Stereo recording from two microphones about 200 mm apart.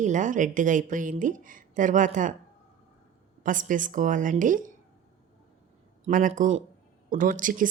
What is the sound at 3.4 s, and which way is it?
Speech, 40° right (ahead or behind).